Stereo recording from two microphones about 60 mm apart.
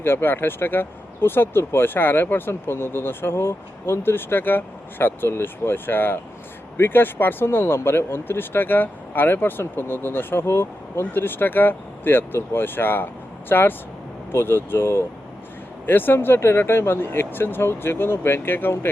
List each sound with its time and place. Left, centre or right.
0.0 s speech: left